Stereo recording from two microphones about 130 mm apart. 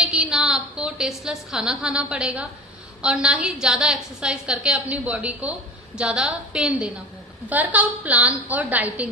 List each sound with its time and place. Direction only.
0.1 s a woman's voice: 5° right (ahead or behind)